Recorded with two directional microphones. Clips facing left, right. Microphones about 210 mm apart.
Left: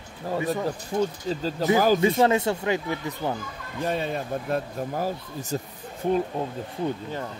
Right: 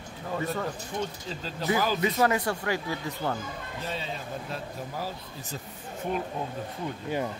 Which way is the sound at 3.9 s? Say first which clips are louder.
Left 9 dB; 55° left (ahead or behind).